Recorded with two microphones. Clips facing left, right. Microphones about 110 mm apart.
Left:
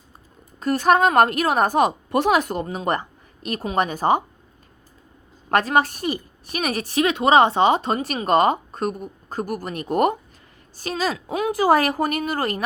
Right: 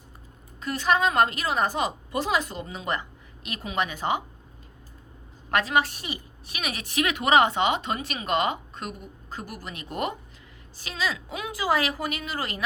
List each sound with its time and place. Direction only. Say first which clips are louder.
0.6 s a woman's voice: left 7 dB; 45° left (ahead or behind)
5.5 s a woman's voice: left 5 dB; 45° left (ahead or behind)